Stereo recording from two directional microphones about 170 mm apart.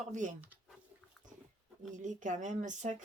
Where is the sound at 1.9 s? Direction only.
45° right (ahead or behind).